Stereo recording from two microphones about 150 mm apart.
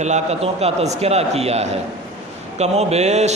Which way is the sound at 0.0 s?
50° right (ahead or behind).